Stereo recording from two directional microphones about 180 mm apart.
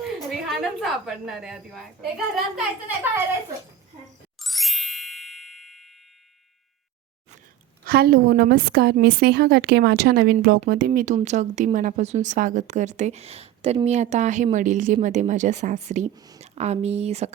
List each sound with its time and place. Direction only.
0.3 s a woman's voice: centre (ahead or behind)
4.4 s ding: centre (ahead or behind)
7.9 s a woman's voice: 55° right (ahead or behind); by 16.0 s 40° right (ahead or behind)
16.1 s speech: 20° right (ahead or behind)
16.4 s a woman's voice: 35° right (ahead or behind)